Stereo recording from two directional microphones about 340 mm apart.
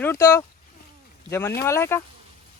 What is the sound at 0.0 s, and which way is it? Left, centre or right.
Speech, centre.